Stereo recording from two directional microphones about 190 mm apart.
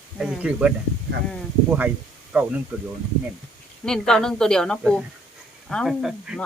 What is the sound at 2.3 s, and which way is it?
Speech, 5° right (ahead or behind).